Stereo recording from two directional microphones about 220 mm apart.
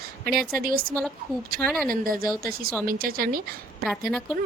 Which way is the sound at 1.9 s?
40° right (ahead or behind).